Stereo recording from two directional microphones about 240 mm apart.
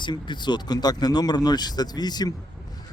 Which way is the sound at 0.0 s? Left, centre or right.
Centre.